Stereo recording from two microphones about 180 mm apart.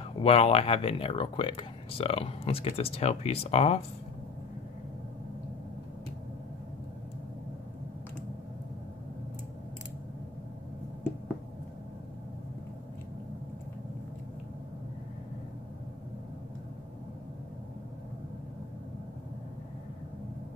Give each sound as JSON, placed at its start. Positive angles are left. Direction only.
{"t": 0.2, "sound": "speech", "side_deg": 35}